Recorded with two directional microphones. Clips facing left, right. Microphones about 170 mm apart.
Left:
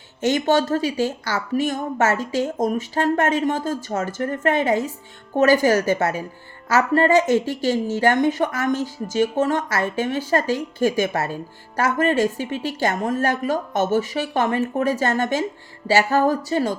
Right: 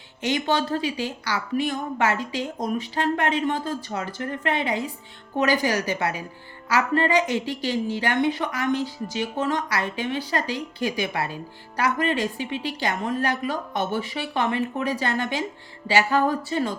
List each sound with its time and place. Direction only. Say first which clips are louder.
0.2 s speech: left 5 dB; 45° left (ahead or behind)